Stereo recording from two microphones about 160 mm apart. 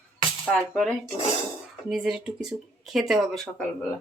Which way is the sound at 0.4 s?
5° left (ahead or behind).